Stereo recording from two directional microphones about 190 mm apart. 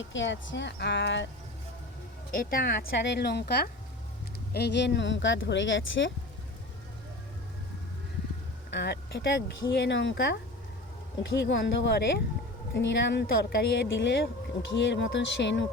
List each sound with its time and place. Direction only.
0.0 s speech: 75° left (ahead or behind)
2.3 s speech: 50° left (ahead or behind); by 6.1 s 75° left (ahead or behind)
8.7 s speech: 60° left (ahead or behind)